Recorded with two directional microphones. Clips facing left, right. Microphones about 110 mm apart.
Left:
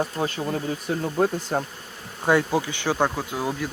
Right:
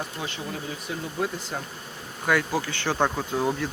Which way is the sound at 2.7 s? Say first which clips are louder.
Left 1 dB; 10° left (ahead or behind).